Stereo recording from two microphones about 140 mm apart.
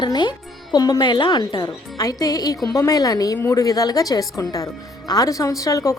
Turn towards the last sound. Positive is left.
turn(degrees=20)  # may be behind; listen again after turning